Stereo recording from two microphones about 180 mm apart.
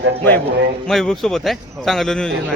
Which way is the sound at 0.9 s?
Centre (ahead or behind).